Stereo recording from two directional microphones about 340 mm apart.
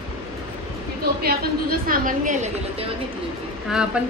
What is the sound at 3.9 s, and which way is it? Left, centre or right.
Speech, centre.